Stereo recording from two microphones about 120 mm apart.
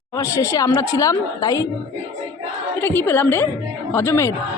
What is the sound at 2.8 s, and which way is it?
A woman's voice, 15° left (ahead or behind).